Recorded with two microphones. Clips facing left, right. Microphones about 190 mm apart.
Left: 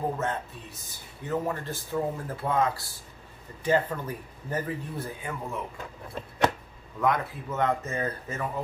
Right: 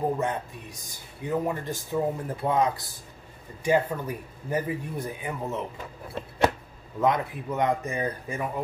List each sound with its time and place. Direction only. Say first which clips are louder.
0.2 s speech: right 2 dB; 15° right (ahead or behind)
7.0 s speech: right 2 dB; 20° right (ahead or behind)